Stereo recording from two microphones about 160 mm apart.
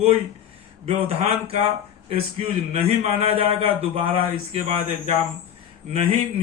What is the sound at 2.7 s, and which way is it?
Speech, 40° right (ahead or behind).